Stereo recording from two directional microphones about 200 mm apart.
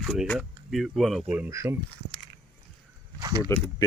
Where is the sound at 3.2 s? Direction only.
20° right (ahead or behind).